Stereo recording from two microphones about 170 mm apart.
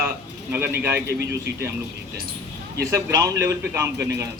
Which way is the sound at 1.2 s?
80° right.